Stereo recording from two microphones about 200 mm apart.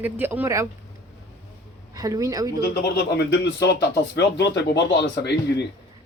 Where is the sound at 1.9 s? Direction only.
20° right (ahead or behind).